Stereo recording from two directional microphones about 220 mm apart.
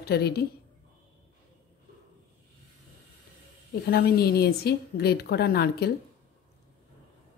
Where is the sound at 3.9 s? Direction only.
45° left (ahead or behind).